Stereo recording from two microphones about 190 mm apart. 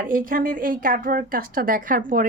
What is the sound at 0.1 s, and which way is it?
A woman's voice, 45° right (ahead or behind).